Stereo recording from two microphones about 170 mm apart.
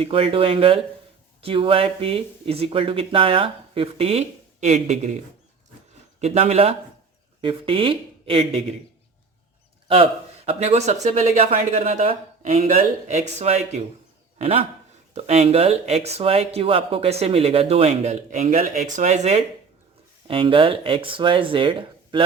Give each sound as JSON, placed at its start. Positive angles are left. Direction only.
{"t": 0.0, "sound": "speech", "side_deg": -35}
{"t": 6.1, "sound": "speech", "side_deg": -40}
{"t": 9.9, "sound": "a man's voice", "side_deg": -35}